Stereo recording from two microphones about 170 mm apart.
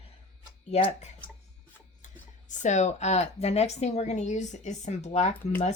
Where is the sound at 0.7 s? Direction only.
40° left (ahead or behind).